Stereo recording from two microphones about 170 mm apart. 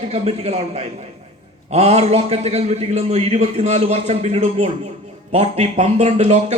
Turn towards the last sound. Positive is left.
turn(degrees=-45)  # may be behind; listen again after turning